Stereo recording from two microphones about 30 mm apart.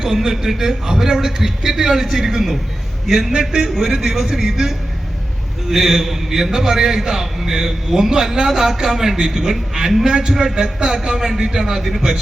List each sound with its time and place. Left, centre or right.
0.0 s a man's voice: centre